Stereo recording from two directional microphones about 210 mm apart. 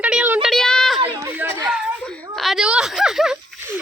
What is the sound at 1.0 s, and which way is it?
A woman's voice, 10° right (ahead or behind).